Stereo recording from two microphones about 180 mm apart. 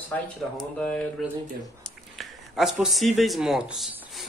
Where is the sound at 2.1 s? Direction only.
Centre (ahead or behind).